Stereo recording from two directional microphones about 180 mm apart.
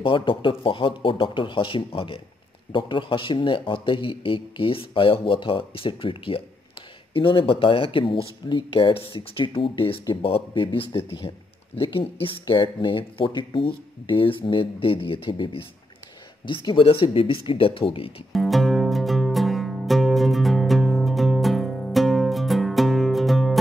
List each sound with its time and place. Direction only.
0.0 s speech: 30° left (ahead or behind)
18.3 s music: centre (ahead or behind)